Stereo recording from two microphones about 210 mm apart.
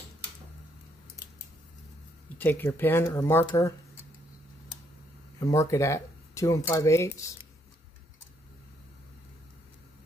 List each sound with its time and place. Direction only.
2.3 s speech: 10° left (ahead or behind)
5.4 s speech: 15° left (ahead or behind)